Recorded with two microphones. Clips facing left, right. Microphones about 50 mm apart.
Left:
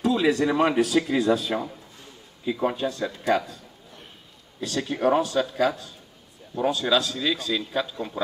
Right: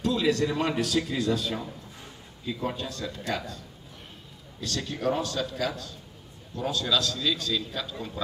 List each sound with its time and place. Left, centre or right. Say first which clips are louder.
0.0 s a man's voice: left 4 dB; centre
4.6 s a man's voice: left 6 dB; left